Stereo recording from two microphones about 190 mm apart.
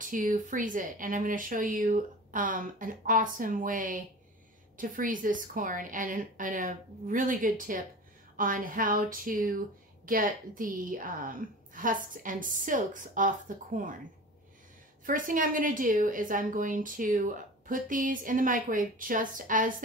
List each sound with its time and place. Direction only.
0.0 s a woman's voice: 45° right (ahead or behind)
15.0 s a woman's voice: 45° right (ahead or behind)